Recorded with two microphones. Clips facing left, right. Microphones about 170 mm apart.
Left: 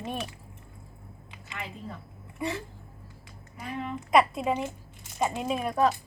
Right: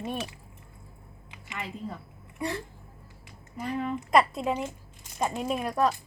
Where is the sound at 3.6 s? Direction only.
Centre (ahead or behind).